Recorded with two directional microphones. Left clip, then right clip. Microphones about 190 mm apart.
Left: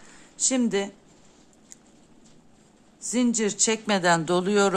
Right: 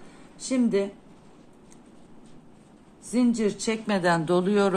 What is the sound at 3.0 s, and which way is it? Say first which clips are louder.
A woman's voice: even; 40° left (ahead or behind).